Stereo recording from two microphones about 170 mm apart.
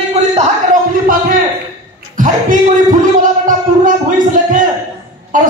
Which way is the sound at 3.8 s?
50° right (ahead or behind).